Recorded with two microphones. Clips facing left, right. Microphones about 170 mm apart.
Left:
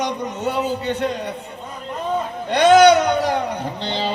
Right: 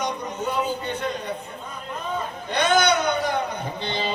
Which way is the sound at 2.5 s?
80° left.